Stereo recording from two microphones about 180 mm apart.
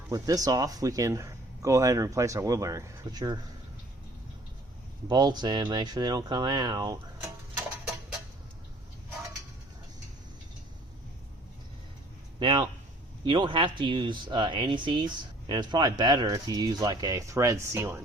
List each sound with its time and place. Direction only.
0.1 s speech: 20° right (ahead or behind)
5.0 s speech: 25° right (ahead or behind)
12.4 s speech: 25° right (ahead or behind)